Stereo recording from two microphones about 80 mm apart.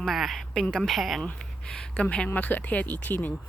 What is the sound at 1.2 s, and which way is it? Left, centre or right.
Speech, centre.